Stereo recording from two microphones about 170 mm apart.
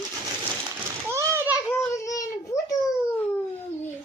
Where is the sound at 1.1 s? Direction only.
15° right (ahead or behind).